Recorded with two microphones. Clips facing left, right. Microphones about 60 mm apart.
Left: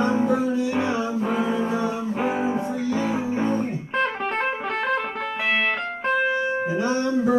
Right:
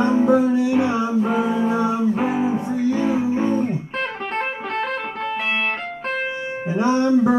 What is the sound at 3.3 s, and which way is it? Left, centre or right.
Music, centre.